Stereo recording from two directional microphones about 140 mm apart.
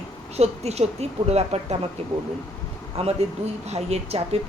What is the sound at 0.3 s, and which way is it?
A woman's voice, 50° right (ahead or behind).